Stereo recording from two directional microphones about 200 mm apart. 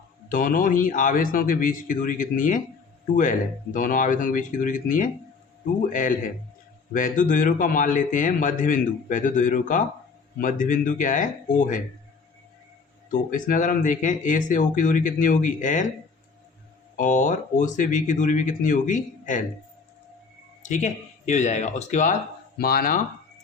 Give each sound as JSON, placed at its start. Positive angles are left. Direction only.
{"t": 0.3, "sound": "speech", "side_deg": 45}
{"t": 13.1, "sound": "speech", "side_deg": 40}
{"t": 17.0, "sound": "speech", "side_deg": 40}
{"t": 20.6, "sound": "speech", "side_deg": 40}
{"t": 22.5, "sound": "speech", "side_deg": 50}